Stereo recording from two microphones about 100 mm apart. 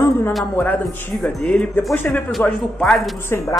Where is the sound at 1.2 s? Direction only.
10° left (ahead or behind).